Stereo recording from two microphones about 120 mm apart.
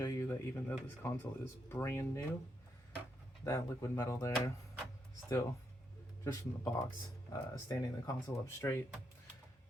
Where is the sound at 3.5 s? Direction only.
25° left (ahead or behind).